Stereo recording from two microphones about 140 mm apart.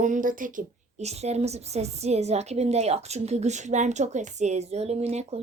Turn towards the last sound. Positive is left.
turn(degrees=-50)  # may be behind; listen again after turning